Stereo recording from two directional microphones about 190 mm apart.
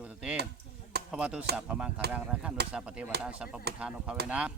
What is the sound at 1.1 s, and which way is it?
Speech, 5° right (ahead or behind).